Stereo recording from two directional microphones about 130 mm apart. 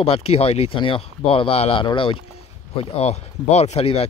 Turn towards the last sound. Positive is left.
turn(degrees=55)  # may be behind; listen again after turning